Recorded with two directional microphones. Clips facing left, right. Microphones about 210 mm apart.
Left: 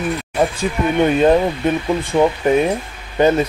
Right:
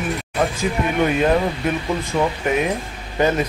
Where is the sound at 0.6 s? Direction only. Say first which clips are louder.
Left 3 dB; 30° left (ahead or behind).